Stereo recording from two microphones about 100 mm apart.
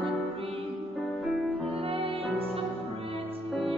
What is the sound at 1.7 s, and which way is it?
Music, 70° right (ahead or behind).